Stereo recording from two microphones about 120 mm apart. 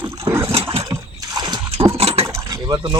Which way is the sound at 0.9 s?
35° right (ahead or behind).